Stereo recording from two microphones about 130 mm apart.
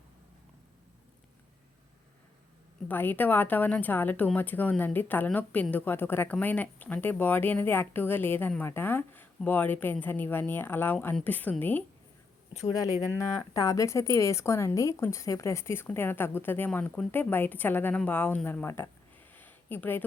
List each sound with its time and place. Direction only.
2.9 s speech: 15° left (ahead or behind)
12.7 s speech: 25° left (ahead or behind)
19.3 s a sound: 15° left (ahead or behind)